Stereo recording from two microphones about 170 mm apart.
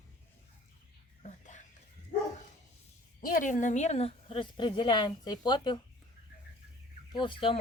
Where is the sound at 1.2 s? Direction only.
45° left (ahead or behind).